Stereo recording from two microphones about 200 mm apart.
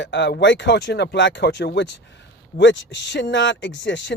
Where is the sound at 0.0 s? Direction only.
60° left (ahead or behind).